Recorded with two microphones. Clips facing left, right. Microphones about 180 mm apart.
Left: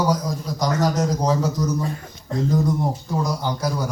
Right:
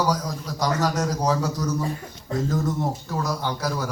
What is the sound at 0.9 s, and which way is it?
Speech, 10° right (ahead or behind).